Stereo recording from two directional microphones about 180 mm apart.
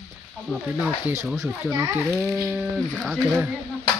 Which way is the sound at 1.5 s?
5° right (ahead or behind).